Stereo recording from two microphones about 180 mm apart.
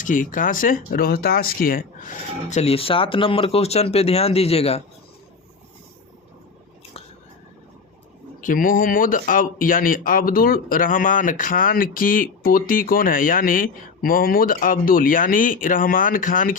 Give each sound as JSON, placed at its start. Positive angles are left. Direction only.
{"t": 0.0, "sound": "speech", "side_deg": 45}
{"t": 8.4, "sound": "speech", "side_deg": 50}